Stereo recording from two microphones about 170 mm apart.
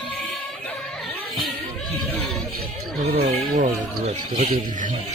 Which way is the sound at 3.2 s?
40° right (ahead or behind).